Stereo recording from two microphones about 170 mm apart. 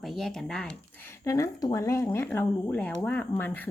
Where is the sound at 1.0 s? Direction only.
15° left (ahead or behind).